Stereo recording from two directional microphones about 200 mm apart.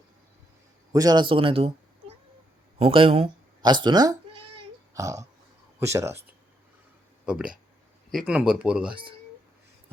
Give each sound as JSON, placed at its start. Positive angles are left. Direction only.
{"t": 0.9, "sound": "speech", "side_deg": -20}
{"t": 4.9, "sound": "a sound", "side_deg": -15}
{"t": 5.8, "sound": "speech", "side_deg": -15}
{"t": 7.3, "sound": "speech", "side_deg": -5}